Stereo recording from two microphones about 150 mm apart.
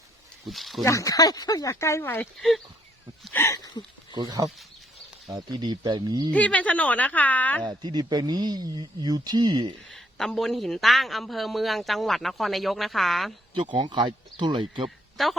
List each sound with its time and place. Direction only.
0.4 s a woman's voice: centre (ahead or behind)
0.9 s speech: 20° left (ahead or behind)
3.3 s speech: 20° left (ahead or behind)
4.1 s speech: 30° right (ahead or behind)
6.3 s a woman's voice: 10° left (ahead or behind)
7.6 s speech: 30° right (ahead or behind)
9.9 s a woman's voice: centre (ahead or behind)
13.5 s speech: 30° right (ahead or behind)
14.8 s speech: centre (ahead or behind)